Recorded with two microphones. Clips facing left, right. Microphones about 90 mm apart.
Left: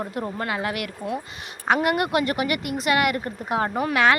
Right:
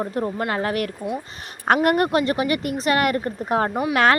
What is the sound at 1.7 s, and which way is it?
Speech, 50° right (ahead or behind).